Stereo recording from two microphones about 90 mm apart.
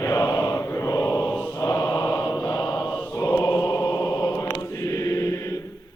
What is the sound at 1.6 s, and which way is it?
Mantra, 40° left (ahead or behind).